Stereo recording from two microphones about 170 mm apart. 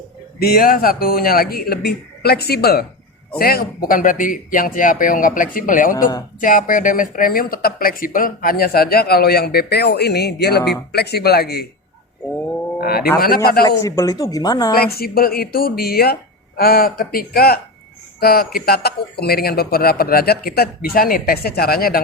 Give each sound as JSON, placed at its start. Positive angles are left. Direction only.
{"t": 0.3, "sound": "speech", "side_deg": 60}
{"t": 12.8, "sound": "speech", "side_deg": 65}
{"t": 13.7, "sound": "speech", "side_deg": 20}
{"t": 14.8, "sound": "speech", "side_deg": 65}